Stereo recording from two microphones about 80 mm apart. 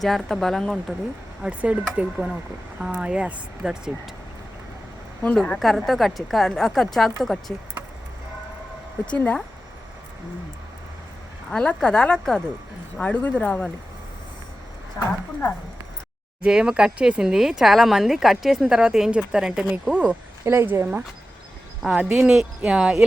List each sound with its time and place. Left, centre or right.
0.3 s a woman's voice: centre
1.4 s speech: centre
5.5 s a woman's voice: centre
9.0 s speech: centre
11.4 s speech: centre
15.0 s speech: left
16.4 s speech: centre
20.4 s speech: right
22.1 s speech: centre